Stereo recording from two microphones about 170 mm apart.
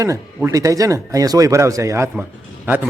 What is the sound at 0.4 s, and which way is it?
A man's voice, 20° right (ahead or behind).